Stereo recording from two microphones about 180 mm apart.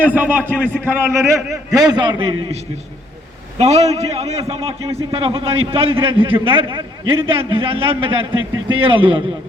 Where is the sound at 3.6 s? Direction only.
35° right (ahead or behind).